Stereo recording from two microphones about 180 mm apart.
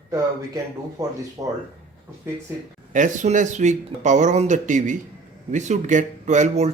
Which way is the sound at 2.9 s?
45° right (ahead or behind).